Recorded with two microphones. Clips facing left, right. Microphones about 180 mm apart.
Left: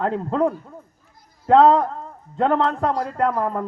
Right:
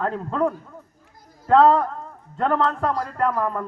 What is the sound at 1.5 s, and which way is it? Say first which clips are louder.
A man's voice: left 2 dB; 20° left (ahead or behind).